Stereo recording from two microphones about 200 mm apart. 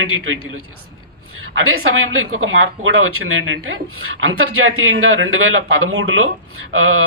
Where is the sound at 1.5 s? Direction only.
90° right.